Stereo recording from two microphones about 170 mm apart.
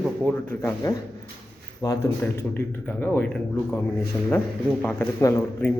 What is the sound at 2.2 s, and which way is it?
Speech, 10° left (ahead or behind).